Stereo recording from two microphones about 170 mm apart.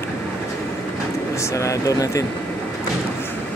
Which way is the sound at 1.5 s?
20° left (ahead or behind).